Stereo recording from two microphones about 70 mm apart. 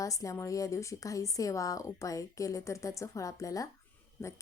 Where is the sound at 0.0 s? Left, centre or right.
Left.